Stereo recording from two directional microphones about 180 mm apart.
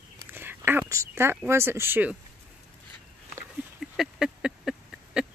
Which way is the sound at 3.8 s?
Centre (ahead or behind).